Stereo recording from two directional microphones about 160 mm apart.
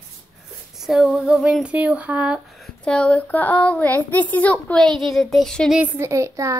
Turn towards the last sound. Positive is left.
turn(degrees=-20)  # may be behind; listen again after turning